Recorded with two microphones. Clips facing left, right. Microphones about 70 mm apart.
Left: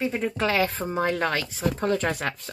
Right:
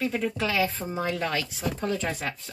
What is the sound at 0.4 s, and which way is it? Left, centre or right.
Speech, left.